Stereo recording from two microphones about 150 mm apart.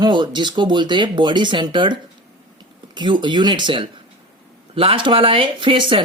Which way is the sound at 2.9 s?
30° right (ahead or behind).